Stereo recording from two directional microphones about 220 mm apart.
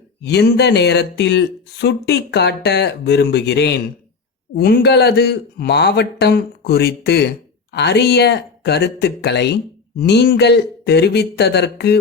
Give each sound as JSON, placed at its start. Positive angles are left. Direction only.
{"t": 0.2, "sound": "speech", "side_deg": 50}